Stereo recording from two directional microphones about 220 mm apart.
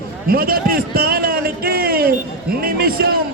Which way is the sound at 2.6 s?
45° right (ahead or behind).